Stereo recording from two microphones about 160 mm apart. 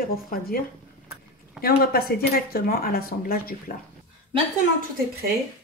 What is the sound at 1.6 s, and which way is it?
Speech, 70° left (ahead or behind).